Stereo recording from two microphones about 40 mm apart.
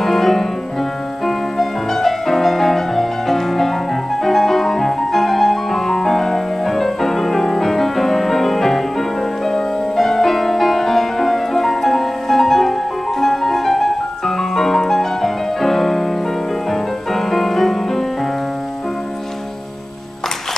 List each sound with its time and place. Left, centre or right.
0.0 s music: centre